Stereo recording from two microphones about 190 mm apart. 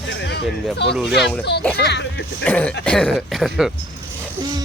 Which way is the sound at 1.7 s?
60° left (ahead or behind).